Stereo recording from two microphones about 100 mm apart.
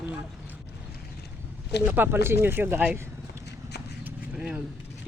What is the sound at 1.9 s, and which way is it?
Speech, 20° right (ahead or behind).